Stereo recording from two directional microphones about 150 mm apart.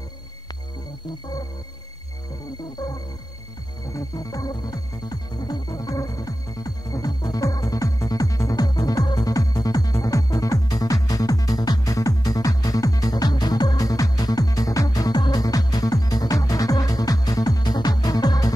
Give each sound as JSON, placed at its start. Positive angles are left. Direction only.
{"t": 3.9, "sound": "music", "side_deg": 25}